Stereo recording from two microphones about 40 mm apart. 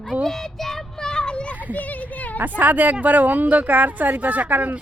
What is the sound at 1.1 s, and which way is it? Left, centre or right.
Children playing, left.